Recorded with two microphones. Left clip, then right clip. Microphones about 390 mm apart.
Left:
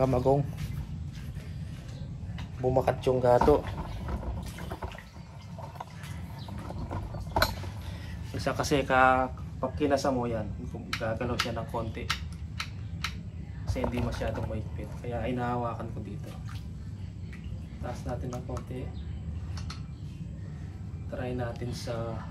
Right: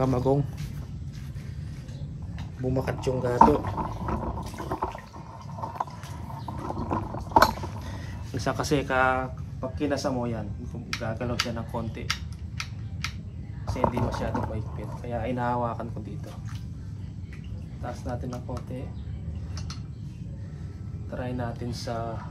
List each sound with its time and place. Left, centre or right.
0.0 s speech: centre
2.6 s speech: centre
3.7 s a sound: right
6.6 s boat: right
8.4 s speech: centre
13.7 s speech: centre
21.2 s speech: centre